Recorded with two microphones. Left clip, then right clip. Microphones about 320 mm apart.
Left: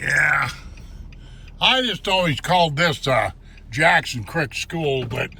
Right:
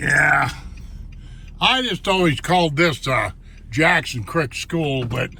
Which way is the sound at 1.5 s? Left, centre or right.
Centre.